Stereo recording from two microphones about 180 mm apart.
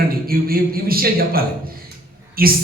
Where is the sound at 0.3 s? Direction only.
55° right (ahead or behind).